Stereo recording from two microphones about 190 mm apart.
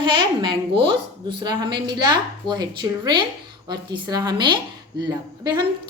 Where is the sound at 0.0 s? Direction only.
25° right (ahead or behind).